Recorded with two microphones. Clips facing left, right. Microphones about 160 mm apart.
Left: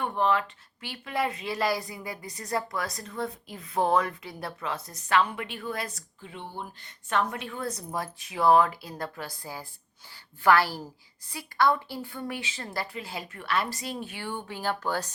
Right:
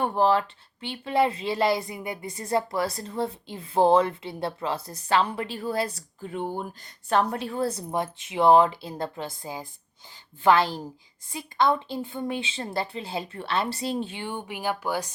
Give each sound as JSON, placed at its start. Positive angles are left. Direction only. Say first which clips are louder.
{"t": 0.0, "sound": "speech", "louder": "right 4 dB", "side_deg": -35}
{"t": 6.3, "sound": "speech", "louder": "right 8 dB", "side_deg": -45}